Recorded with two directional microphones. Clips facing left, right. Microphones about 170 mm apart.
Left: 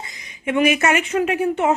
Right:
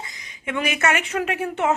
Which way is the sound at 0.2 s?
15° left (ahead or behind).